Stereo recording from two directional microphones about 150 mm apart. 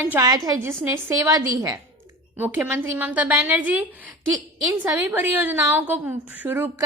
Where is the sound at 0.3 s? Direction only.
25° right (ahead or behind).